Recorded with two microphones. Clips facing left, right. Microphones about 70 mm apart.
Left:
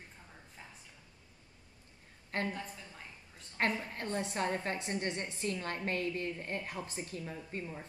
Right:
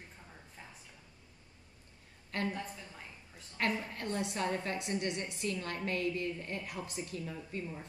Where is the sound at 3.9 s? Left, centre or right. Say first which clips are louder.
Even; left.